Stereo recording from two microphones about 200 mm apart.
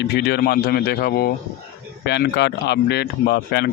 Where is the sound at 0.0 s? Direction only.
55° left (ahead or behind).